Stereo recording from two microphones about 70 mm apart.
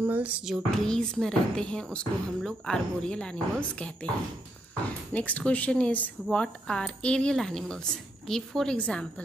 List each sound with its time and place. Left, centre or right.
0.0 s music: right
0.5 s speech: centre
5.1 s speech: centre